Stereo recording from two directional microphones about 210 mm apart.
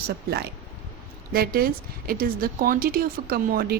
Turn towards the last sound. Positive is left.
turn(degrees=-45)  # may be behind; listen again after turning